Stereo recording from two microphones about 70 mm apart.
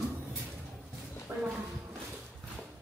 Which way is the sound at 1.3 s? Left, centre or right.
Right.